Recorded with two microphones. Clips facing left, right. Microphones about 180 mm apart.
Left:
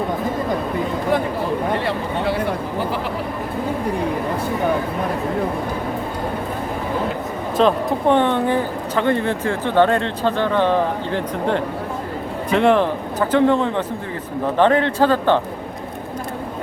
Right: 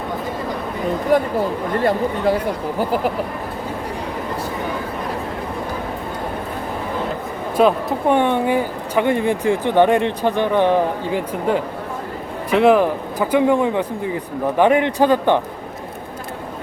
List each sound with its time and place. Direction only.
1.1 s speech: 45° right (ahead or behind)
7.5 s speech: 10° right (ahead or behind)